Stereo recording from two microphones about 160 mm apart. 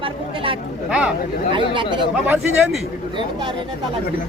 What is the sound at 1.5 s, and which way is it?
Speech, 30° right (ahead or behind).